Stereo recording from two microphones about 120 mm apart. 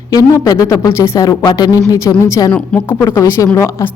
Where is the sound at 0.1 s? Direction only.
30° left (ahead or behind).